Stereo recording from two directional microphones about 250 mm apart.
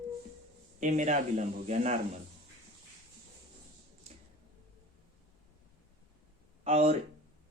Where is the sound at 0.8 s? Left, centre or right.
Right.